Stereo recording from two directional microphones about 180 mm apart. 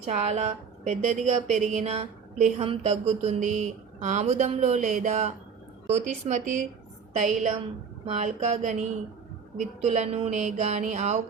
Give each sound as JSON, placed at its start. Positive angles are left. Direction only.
{"t": 0.0, "sound": "speech", "side_deg": -40}